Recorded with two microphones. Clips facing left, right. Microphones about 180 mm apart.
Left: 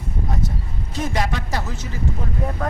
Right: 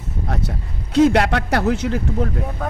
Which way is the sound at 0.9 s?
70° right (ahead or behind).